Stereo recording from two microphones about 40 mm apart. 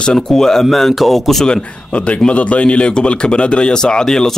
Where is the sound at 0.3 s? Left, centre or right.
Centre.